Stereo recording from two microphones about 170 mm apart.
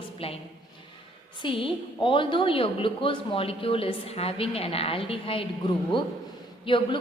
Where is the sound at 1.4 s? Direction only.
30° left (ahead or behind).